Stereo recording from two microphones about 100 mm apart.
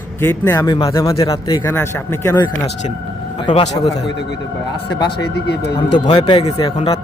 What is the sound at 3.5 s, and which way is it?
Speech, 50° left (ahead or behind).